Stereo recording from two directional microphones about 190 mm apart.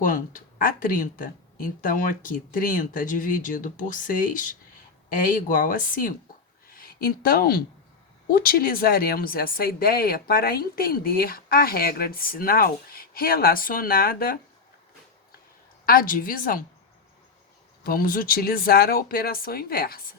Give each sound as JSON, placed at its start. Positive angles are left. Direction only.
{"t": 0.0, "sound": "speech", "side_deg": 45}
{"t": 15.9, "sound": "speech", "side_deg": 50}
{"t": 17.8, "sound": "speech", "side_deg": 50}